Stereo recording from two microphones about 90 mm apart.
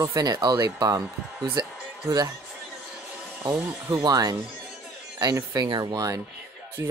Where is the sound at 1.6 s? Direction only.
50° right (ahead or behind).